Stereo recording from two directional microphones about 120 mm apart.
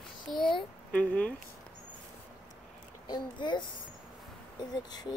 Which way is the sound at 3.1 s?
40° left (ahead or behind).